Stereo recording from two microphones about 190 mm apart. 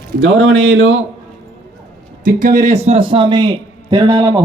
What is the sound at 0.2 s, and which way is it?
Speech, 75° right (ahead or behind).